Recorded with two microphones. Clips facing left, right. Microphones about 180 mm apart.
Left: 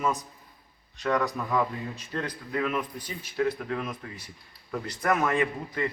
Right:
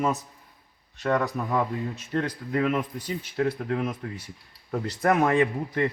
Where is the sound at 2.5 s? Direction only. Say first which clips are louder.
Right 4 dB; 25° right (ahead or behind).